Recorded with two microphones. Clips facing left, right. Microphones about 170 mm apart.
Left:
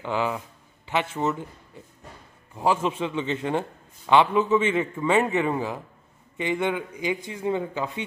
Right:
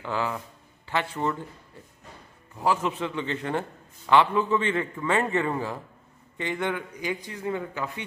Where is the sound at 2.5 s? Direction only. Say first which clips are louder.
Left 2 dB; 25° left (ahead or behind).